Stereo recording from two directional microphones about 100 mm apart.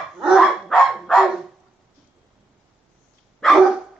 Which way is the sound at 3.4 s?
Centre (ahead or behind).